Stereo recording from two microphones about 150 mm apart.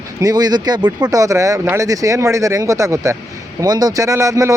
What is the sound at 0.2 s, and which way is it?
A man's voice, 25° right (ahead or behind).